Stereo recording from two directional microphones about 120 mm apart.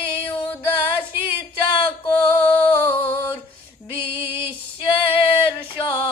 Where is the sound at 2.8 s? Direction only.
15° left (ahead or behind).